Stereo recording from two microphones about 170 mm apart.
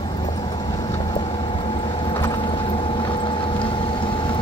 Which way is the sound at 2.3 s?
30° left (ahead or behind).